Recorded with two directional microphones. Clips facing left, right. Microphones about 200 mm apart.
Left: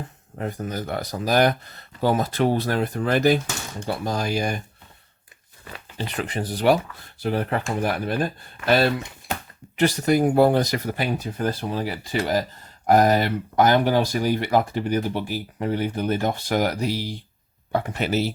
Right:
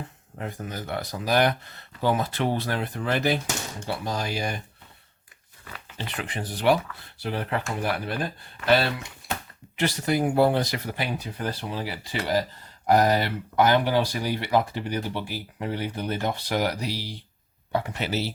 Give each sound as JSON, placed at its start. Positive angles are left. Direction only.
{"t": 0.3, "sound": "speech", "side_deg": 40}
{"t": 6.0, "sound": "speech", "side_deg": 40}